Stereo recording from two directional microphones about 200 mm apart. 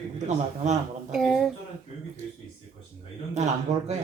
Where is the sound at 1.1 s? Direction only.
Centre (ahead or behind).